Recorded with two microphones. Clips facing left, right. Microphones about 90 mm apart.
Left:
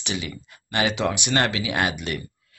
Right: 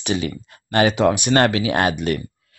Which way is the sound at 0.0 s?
45° right (ahead or behind).